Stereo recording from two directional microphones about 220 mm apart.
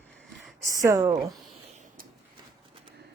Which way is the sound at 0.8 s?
15° right (ahead or behind).